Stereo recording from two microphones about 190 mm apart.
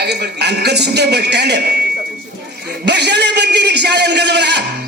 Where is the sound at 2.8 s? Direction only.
60° right (ahead or behind).